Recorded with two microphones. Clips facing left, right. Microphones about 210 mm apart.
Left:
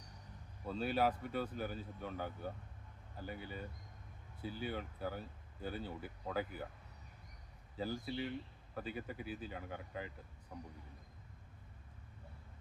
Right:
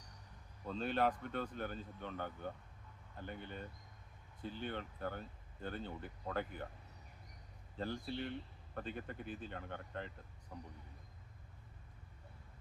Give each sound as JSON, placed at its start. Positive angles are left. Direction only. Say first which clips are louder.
{"t": 0.6, "sound": "speech", "louder": "left 1 dB", "side_deg": 5}
{"t": 7.8, "sound": "speech", "louder": "left 1 dB", "side_deg": 5}